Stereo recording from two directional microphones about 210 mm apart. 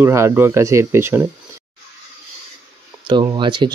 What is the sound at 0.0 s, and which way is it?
Speech, 10° right (ahead or behind).